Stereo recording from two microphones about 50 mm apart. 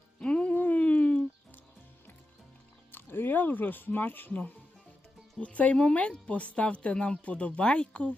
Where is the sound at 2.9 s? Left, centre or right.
Left.